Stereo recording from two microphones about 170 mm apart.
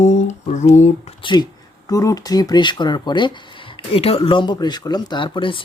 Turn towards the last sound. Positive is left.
turn(degrees=30)  # may be behind; listen again after turning